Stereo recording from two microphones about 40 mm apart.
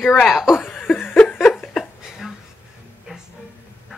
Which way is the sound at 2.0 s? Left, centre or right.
Centre.